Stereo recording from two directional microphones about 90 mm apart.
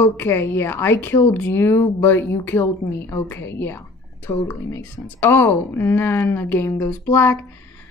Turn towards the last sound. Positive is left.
turn(degrees=25)  # may be behind; listen again after turning